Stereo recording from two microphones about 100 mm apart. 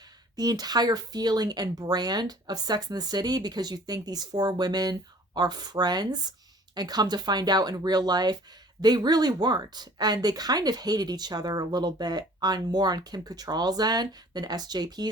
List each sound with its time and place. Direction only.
0.3 s speech: 40° right (ahead or behind)